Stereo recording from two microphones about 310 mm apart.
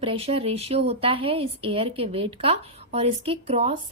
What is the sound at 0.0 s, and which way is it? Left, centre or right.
A woman's voice, centre.